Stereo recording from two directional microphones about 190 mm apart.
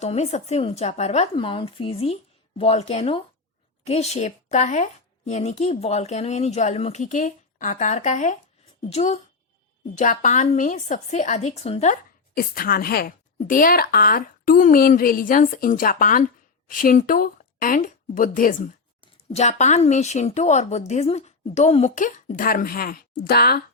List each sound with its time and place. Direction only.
0.0 s a woman's voice: 35° left (ahead or behind)
12.3 s a woman's voice: 50° left (ahead or behind)